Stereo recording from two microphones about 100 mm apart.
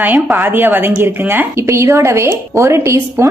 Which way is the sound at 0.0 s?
20° right (ahead or behind).